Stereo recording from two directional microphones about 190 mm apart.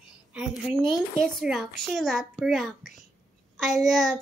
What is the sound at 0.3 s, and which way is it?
A woman's voice, 5° right (ahead or behind).